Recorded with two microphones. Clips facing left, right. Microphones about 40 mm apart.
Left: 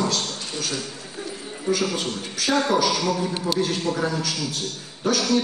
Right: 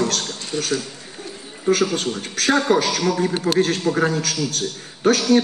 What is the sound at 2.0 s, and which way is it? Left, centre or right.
A man's voice, right.